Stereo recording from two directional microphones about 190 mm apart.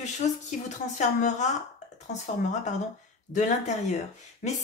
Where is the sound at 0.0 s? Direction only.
40° left (ahead or behind).